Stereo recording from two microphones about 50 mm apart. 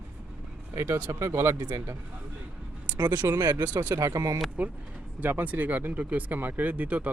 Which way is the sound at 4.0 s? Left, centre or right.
Right.